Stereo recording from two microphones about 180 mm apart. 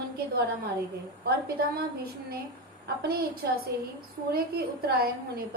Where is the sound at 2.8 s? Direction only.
60° right (ahead or behind).